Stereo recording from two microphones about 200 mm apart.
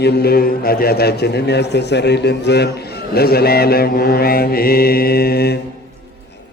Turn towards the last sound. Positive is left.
turn(degrees=50)  # may be behind; listen again after turning